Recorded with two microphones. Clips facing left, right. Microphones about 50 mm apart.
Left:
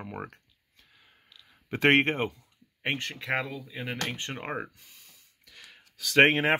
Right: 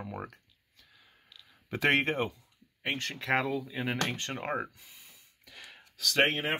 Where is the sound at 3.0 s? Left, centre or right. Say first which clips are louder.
Left 1 dB; centre.